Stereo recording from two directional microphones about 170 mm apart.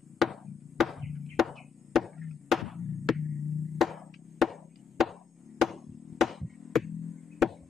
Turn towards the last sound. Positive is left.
turn(degrees=0)  # may be behind; listen again after turning